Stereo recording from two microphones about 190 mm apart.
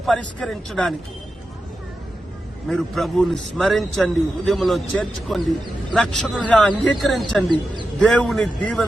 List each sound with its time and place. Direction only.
0.0 s a man's voice: 5° left (ahead or behind)
2.6 s a man's voice: centre (ahead or behind)